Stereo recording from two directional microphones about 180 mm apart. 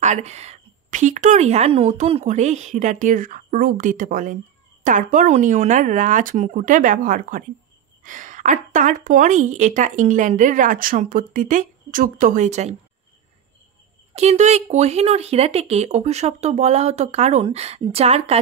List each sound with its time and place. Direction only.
0.0 s a woman's voice: 40° right (ahead or behind)
14.1 s speech: 40° right (ahead or behind)